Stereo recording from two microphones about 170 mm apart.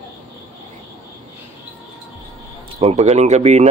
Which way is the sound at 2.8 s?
40° right (ahead or behind).